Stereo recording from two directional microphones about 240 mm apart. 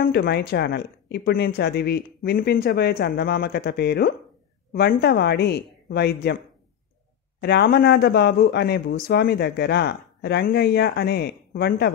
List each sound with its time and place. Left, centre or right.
0.0 s speech: left
7.4 s speech: left